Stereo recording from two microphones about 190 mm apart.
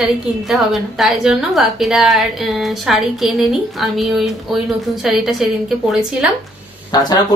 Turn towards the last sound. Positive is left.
turn(degrees=20)  # may be behind; listen again after turning